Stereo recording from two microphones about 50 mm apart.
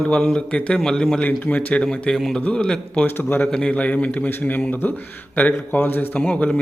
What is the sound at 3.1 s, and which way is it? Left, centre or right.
Speech, left.